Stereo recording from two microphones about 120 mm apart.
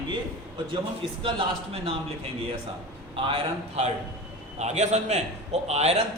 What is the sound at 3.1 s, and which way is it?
Speech, 45° right (ahead or behind).